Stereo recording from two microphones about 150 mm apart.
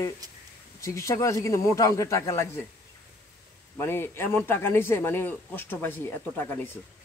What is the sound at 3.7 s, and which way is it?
A man's voice, 15° left (ahead or behind).